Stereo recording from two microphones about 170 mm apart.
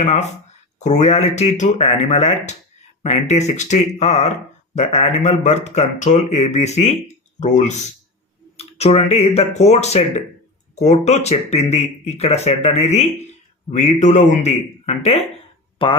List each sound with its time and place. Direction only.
0.0 s speech: 40° left (ahead or behind)